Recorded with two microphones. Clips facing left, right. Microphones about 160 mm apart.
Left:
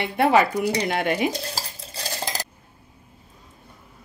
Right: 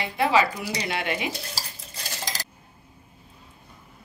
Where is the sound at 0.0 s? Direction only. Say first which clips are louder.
Left 3 dB; 55° left (ahead or behind).